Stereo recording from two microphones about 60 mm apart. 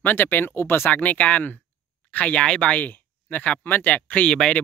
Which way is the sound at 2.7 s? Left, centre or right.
Left.